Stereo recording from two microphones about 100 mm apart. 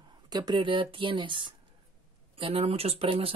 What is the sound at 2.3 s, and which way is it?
Speech, 65° right (ahead or behind).